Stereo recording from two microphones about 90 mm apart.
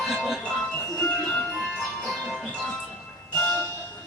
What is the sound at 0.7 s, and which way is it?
Music, 15° left (ahead or behind).